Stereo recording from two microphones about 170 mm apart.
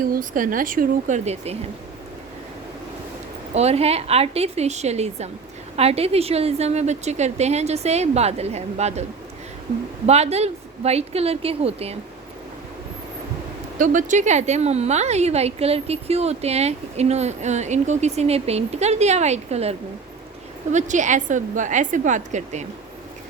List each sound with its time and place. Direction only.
0.0 s a woman's voice: 55° right (ahead or behind)
3.5 s a woman's voice: 40° right (ahead or behind)
10.1 s a woman's voice: 40° right (ahead or behind)
13.7 s a woman's voice: 50° right (ahead or behind)
20.7 s a woman's voice: 45° right (ahead or behind)